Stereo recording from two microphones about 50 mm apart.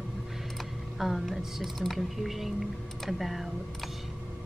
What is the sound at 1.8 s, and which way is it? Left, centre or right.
Speech, centre.